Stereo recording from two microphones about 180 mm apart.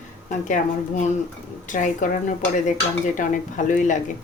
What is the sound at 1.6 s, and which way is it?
Speech, 45° left (ahead or behind).